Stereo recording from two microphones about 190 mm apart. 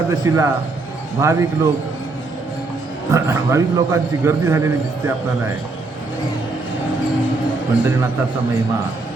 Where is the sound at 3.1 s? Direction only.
15° right (ahead or behind).